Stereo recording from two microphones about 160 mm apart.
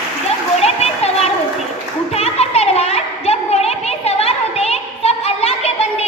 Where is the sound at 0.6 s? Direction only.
40° left (ahead or behind).